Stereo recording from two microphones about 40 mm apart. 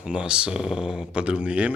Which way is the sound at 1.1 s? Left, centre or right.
Right.